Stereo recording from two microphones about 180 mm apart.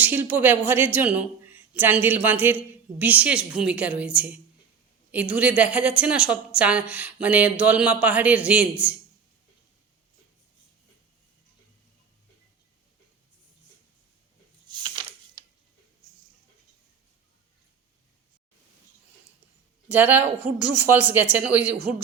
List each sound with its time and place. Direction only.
0.0 s a woman's voice: 10° right (ahead or behind)
14.7 s a sound: 25° right (ahead or behind)
19.9 s a woman's voice: 10° right (ahead or behind)